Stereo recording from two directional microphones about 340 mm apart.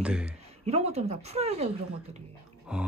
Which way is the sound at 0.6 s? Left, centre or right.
Centre.